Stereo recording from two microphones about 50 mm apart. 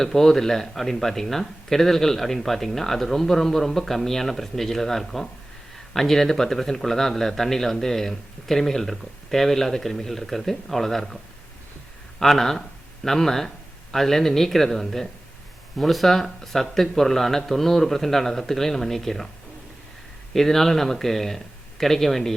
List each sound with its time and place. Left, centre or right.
0.0 s speech: centre
12.2 s speech: centre
20.3 s speech: centre